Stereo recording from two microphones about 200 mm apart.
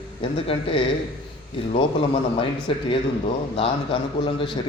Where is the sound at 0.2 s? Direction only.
25° left (ahead or behind).